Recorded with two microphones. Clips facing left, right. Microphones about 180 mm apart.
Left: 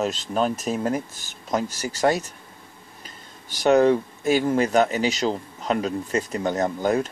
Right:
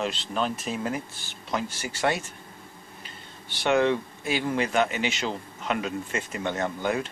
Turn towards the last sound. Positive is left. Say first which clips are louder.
# left 5 dB
turn(degrees=40)  # may be behind; listen again after turning